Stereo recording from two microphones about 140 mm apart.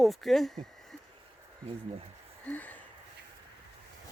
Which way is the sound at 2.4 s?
10° left (ahead or behind).